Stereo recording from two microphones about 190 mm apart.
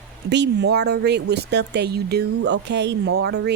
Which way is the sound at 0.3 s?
65° right (ahead or behind).